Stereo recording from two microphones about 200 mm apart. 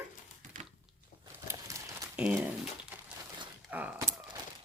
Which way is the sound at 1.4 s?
15° right (ahead or behind).